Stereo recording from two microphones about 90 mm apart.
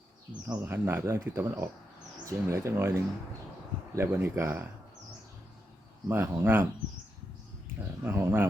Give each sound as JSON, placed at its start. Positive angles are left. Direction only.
{"t": 0.4, "sound": "speech", "side_deg": -25}
{"t": 6.1, "sound": "speech", "side_deg": -25}
{"t": 8.0, "sound": "speech", "side_deg": -25}